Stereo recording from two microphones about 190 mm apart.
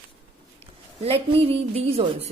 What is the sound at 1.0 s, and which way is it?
A woman's voice, 30° right (ahead or behind).